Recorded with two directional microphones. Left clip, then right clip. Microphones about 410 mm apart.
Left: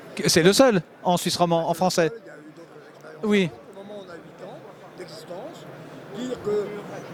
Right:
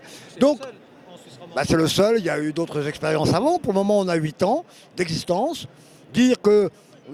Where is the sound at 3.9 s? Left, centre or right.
Right.